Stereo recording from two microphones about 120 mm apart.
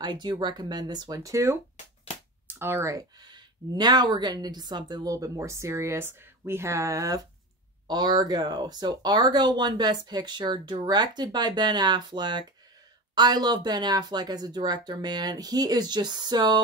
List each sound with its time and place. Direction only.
0.0 s speech: 35° right (ahead or behind); by 3.0 s 20° right (ahead or behind)
3.2 s a woman's voice: 35° right (ahead or behind)